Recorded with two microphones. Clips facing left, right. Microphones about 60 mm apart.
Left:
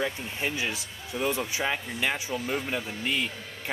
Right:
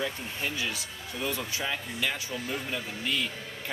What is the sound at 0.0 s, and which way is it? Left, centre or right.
Speech, left.